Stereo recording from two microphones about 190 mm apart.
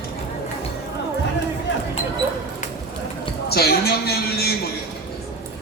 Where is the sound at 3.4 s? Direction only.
55° left (ahead or behind).